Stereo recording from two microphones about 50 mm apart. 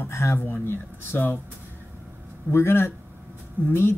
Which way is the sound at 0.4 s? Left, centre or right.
Left.